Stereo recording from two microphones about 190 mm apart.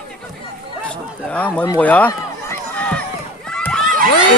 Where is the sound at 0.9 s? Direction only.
5° left (ahead or behind).